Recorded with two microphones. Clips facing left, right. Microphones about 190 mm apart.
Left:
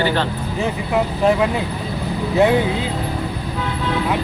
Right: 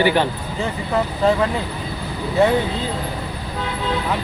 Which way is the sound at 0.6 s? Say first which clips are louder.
Left 1 dB; 10° left (ahead or behind).